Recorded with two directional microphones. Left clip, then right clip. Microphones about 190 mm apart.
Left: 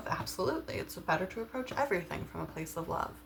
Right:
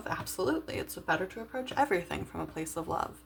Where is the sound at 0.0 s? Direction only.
45° right (ahead or behind).